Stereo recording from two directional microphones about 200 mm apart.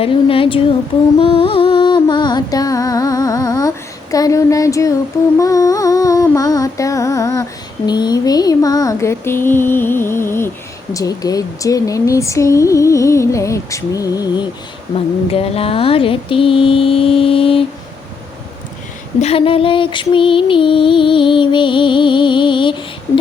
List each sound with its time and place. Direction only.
0.0 s music: 25° left (ahead or behind)
4.1 s speech: 15° left (ahead or behind)
5.4 s music: 15° left (ahead or behind)
7.9 s speech: 20° left (ahead or behind)
15.3 s music: 30° left (ahead or behind)
19.2 s music: 30° left (ahead or behind)